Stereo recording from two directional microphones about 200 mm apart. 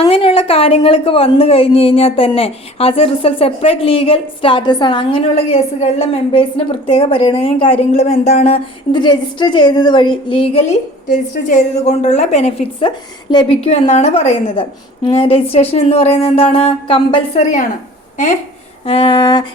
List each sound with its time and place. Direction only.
0.0 s a woman's voice: 25° left (ahead or behind)
18.9 s a woman's voice: 25° left (ahead or behind)